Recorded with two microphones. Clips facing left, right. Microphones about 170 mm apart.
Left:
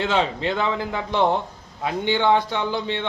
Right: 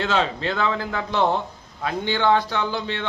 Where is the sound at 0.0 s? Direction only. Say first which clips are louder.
Left 1 dB; 15° left (ahead or behind).